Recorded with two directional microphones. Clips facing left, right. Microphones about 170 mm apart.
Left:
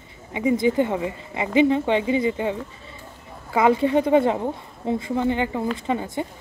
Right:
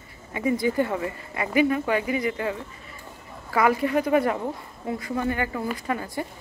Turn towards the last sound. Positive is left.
turn(degrees=20)  # may be behind; listen again after turning